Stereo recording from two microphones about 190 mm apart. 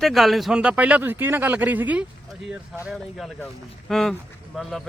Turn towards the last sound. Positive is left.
turn(degrees=0)  # may be behind; listen again after turning